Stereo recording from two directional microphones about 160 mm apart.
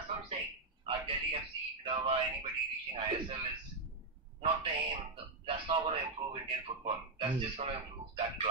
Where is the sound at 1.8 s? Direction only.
35° right (ahead or behind).